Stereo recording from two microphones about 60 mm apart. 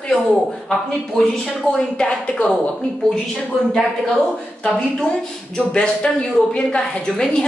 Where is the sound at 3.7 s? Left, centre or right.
Centre.